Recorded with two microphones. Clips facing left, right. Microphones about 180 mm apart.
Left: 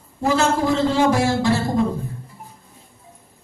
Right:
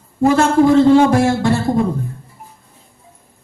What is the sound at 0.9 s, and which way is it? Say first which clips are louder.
Speech: right 6 dB; 55° right (ahead or behind).